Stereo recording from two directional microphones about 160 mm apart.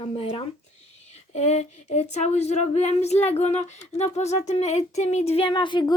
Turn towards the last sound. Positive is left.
turn(degrees=30)  # may be behind; listen again after turning